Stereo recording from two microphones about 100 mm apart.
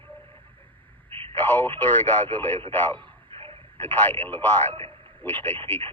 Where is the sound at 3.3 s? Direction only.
70° right (ahead or behind).